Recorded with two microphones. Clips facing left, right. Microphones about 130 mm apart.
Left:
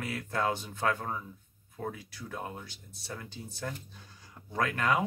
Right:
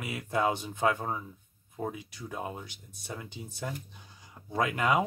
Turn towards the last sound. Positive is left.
turn(degrees=-15)  # may be behind; listen again after turning